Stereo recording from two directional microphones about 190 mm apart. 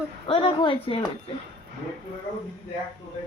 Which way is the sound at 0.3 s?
25° left (ahead or behind).